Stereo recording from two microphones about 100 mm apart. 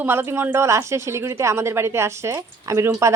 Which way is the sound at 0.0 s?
25° right (ahead or behind).